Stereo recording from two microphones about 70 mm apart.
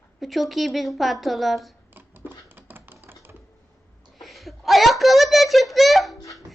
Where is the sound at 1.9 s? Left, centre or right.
Right.